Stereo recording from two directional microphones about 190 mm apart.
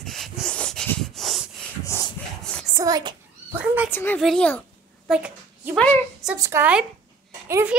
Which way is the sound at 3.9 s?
10° left (ahead or behind).